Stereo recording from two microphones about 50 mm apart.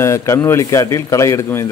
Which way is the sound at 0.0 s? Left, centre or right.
Left.